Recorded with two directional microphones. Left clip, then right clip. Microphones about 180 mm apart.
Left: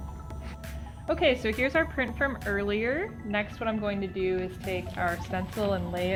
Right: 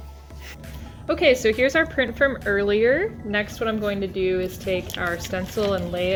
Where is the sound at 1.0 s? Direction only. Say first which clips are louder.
Right 7 dB; 30° left (ahead or behind).